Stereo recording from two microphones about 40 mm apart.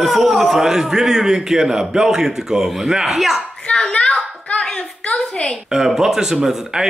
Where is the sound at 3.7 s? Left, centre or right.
Left.